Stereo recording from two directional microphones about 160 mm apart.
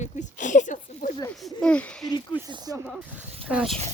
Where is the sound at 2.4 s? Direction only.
25° right (ahead or behind).